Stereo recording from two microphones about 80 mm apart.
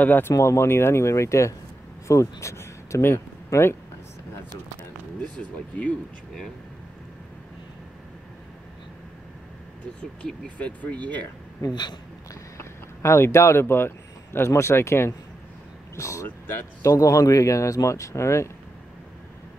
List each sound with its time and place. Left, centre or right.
0.0 s speech: left
0.3 s speech: left
10.2 s speech: centre
11.7 s speech: left
12.5 s speech: left
16.3 s speech: left
16.8 s speech: left